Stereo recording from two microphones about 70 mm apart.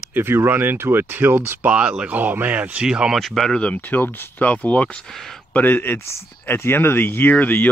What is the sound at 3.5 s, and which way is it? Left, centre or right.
Speech, centre.